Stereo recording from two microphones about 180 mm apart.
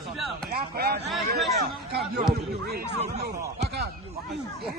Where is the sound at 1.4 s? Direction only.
Centre (ahead or behind).